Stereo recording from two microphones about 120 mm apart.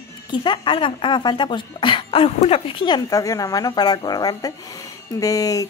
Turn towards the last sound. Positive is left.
turn(degrees=30)  # may be behind; listen again after turning